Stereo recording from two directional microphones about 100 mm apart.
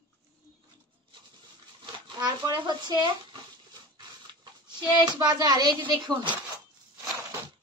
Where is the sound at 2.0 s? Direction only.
50° right (ahead or behind).